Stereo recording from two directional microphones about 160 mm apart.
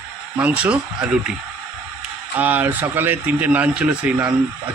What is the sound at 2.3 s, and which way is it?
Speech, 10° right (ahead or behind).